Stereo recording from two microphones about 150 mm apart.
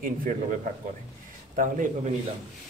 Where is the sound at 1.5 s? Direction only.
60° right (ahead or behind).